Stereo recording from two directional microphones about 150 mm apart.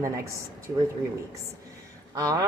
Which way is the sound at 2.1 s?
25° right (ahead or behind).